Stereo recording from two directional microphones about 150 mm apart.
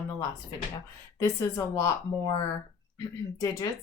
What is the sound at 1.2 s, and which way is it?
Speech, 20° left (ahead or behind).